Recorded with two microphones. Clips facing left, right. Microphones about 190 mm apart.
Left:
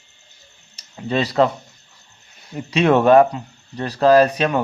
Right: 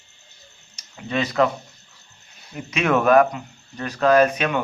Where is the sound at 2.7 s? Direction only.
30° left (ahead or behind).